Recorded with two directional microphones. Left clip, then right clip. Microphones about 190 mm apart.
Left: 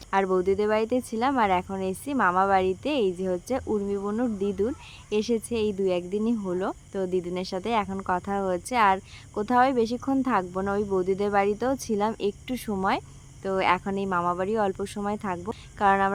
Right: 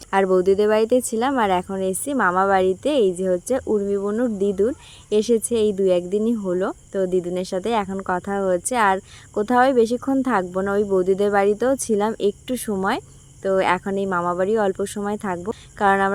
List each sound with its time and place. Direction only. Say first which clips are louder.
0.1 s speech: right 6 dB; 25° right (ahead or behind)